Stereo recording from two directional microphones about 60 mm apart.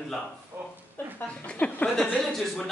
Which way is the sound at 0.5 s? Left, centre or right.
Right.